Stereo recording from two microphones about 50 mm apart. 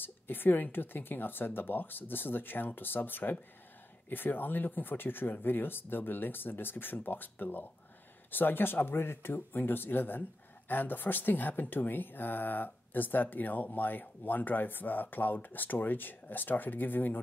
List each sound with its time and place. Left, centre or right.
0.0 s speech: left